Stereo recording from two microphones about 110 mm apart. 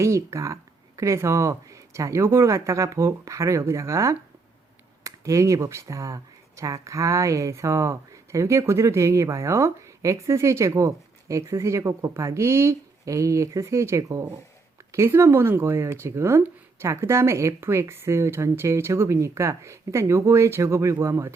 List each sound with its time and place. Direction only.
0.0 s speech: 25° right (ahead or behind)